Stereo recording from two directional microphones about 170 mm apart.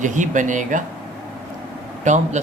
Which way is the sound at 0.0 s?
45° right (ahead or behind).